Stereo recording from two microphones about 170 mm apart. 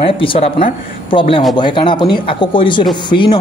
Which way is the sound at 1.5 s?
30° left (ahead or behind).